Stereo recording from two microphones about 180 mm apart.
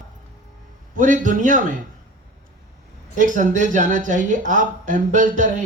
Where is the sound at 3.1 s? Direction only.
45° right (ahead or behind).